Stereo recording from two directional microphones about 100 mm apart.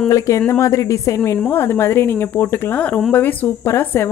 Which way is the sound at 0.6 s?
30° left (ahead or behind).